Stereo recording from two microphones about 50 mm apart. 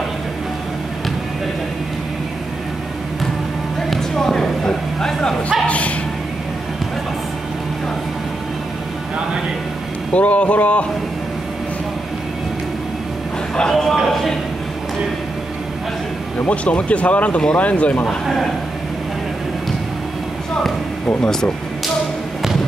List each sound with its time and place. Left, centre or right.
3.9 s a sound: centre
5.7 s speech: left
10.1 s speech: left
13.6 s a man's voice: centre
16.4 s speech: left
21.2 s speech: centre